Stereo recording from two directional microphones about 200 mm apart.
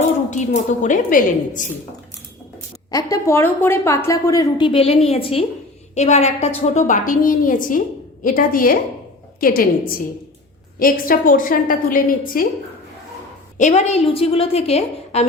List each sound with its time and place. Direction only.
0.3 s a woman's voice: 35° left (ahead or behind)
2.9 s a woman's voice: 15° left (ahead or behind); by 9.6 s 45° left (ahead or behind)
10.8 s a woman's voice: 45° left (ahead or behind)
13.6 s a woman's voice: 35° left (ahead or behind)